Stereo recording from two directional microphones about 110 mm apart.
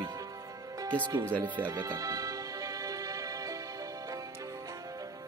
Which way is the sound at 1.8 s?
35° right (ahead or behind).